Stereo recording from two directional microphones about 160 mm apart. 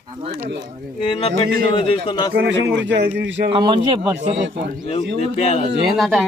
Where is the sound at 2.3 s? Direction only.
90° right.